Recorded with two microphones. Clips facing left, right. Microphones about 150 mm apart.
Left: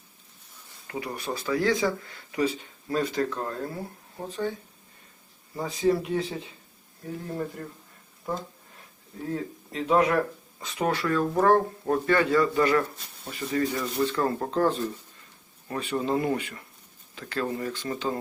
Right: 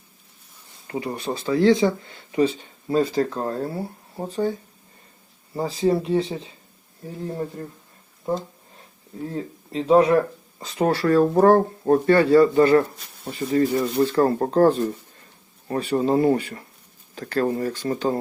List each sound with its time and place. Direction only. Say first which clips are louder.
0.9 s speech: right 5 dB; 25° right (ahead or behind)
5.5 s speech: right 3 dB; 30° right (ahead or behind)
9.3 s speech: right 2 dB; 30° right (ahead or behind)